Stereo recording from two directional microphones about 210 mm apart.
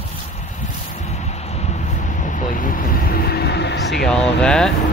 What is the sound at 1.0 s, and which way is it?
Vehicle, 30° left (ahead or behind).